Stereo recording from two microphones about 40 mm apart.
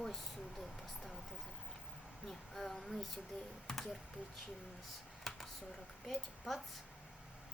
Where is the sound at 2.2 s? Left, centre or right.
Centre.